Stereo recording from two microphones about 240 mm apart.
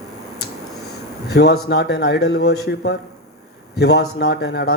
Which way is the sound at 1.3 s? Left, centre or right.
Left.